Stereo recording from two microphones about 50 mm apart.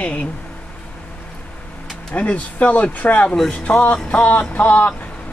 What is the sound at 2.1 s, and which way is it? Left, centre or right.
A man's voice, left.